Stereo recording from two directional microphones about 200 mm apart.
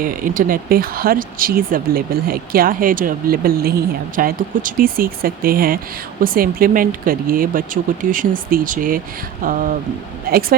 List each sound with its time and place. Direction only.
0.0 s speech: 45° right (ahead or behind)